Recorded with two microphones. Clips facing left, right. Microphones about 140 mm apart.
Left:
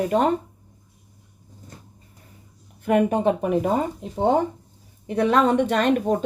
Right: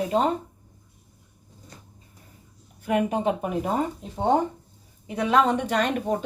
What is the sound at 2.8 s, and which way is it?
Speech, 50° left (ahead or behind).